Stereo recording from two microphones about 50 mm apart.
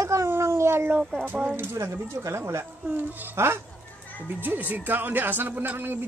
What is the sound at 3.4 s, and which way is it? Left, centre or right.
Speech, right.